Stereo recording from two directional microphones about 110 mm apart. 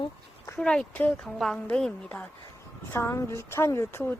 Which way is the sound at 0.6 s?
10° left (ahead or behind).